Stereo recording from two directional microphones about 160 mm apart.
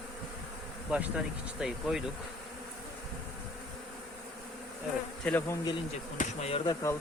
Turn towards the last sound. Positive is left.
turn(degrees=20)  # may be behind; listen again after turning